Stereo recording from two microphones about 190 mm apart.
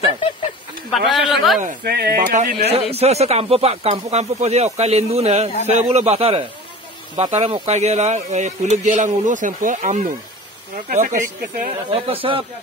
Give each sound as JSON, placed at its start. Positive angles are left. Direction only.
{"t": 0.9, "sound": "speech", "side_deg": 0}
{"t": 1.9, "sound": "speech", "side_deg": -55}
{"t": 2.6, "sound": "speech", "side_deg": -30}
{"t": 11.9, "sound": "speech", "side_deg": -30}